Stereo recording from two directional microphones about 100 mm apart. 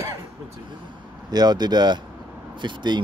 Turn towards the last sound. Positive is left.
turn(degrees=-50)  # may be behind; listen again after turning